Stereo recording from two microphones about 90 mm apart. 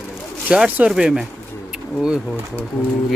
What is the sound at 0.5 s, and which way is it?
Speech, 10° right (ahead or behind).